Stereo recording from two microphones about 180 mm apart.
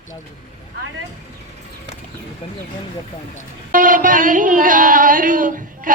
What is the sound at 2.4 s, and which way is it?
Speech, 30° left (ahead or behind).